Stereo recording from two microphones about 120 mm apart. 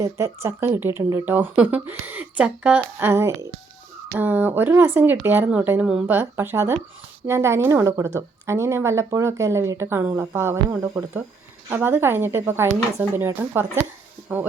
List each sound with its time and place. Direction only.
0.0 s speech: 20° right (ahead or behind); by 6.1 s 5° right (ahead or behind)
6.1 s speech: 20° right (ahead or behind)
14.2 s a sound: 15° right (ahead or behind)